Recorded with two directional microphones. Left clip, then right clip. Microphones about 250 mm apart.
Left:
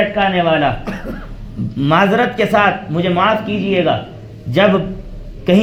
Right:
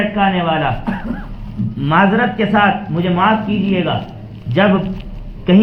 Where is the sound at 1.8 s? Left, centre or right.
Left.